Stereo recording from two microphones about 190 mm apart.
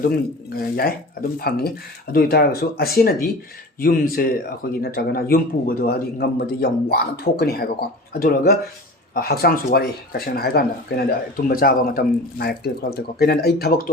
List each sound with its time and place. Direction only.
0.0 s speech: 50° left (ahead or behind)